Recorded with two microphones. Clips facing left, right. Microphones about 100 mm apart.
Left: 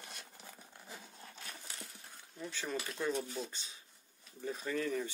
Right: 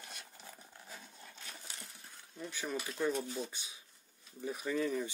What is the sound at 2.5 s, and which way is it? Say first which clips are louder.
Speech: right 1 dB; 10° right (ahead or behind).